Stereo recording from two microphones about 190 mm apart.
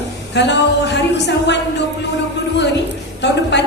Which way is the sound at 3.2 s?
65° left (ahead or behind).